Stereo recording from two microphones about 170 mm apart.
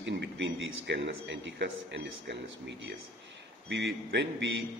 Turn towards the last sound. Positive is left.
turn(degrees=-90)